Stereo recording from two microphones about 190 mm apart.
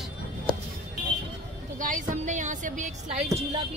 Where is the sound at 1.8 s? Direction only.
40° right (ahead or behind).